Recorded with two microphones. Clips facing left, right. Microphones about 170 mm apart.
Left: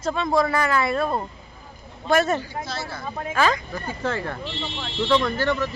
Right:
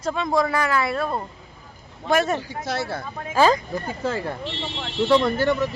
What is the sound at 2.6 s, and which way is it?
Speech, 65° right (ahead or behind).